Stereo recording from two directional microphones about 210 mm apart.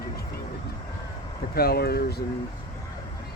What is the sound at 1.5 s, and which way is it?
Speech, 50° left (ahead or behind).